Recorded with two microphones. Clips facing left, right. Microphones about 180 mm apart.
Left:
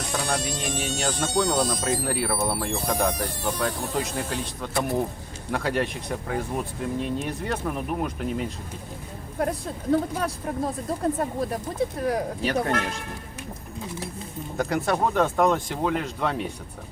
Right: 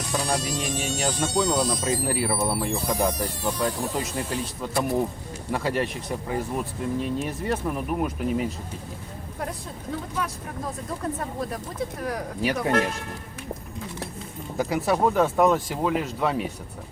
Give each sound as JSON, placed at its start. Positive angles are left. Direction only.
{"t": 0.3, "sound": "speech", "side_deg": -5}
{"t": 9.9, "sound": "speech", "side_deg": 35}
{"t": 12.4, "sound": "speech", "side_deg": -10}
{"t": 14.6, "sound": "speech", "side_deg": -5}